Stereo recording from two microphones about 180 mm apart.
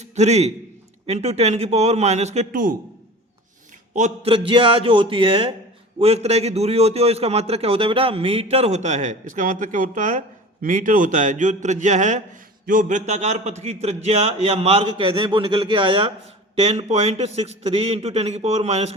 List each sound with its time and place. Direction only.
0.0 s a man's voice: 40° right (ahead or behind)
3.9 s a man's voice: 35° right (ahead or behind)